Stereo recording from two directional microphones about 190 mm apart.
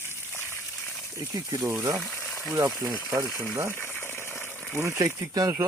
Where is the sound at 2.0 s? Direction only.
5° left (ahead or behind).